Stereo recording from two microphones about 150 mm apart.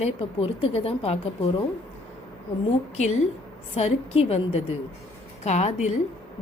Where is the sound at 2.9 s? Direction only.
50° left (ahead or behind).